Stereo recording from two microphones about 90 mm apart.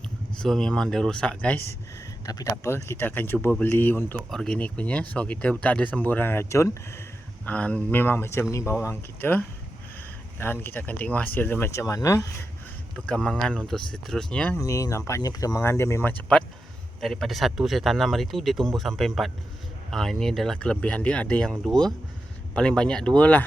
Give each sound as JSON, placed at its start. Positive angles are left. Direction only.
{"t": 0.3, "sound": "speech", "side_deg": 5}
{"t": 2.2, "sound": "speech", "side_deg": 45}
{"t": 2.6, "sound": "speech", "side_deg": 30}
{"t": 4.3, "sound": "speech", "side_deg": 10}
{"t": 7.4, "sound": "speech", "side_deg": 15}
{"t": 13.1, "sound": "speech", "side_deg": 10}
{"t": 14.6, "sound": "speech", "side_deg": 40}
{"t": 15.8, "sound": "speech", "side_deg": 25}
{"t": 17.0, "sound": "speech", "side_deg": 0}